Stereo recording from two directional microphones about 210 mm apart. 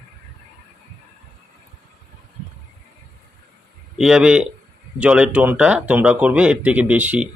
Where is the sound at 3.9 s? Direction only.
5° right (ahead or behind).